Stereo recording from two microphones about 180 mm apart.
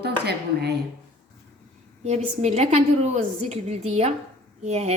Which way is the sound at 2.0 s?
35° right (ahead or behind).